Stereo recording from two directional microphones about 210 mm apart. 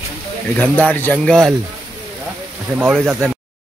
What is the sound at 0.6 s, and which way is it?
Speech, 5° left (ahead or behind).